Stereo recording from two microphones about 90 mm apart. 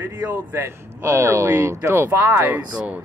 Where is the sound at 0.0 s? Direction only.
20° right (ahead or behind).